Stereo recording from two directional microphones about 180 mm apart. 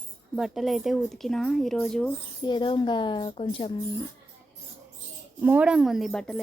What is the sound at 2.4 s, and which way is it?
A woman's voice, 25° left (ahead or behind).